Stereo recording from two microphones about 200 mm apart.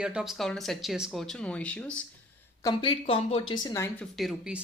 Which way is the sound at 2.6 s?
20° left (ahead or behind).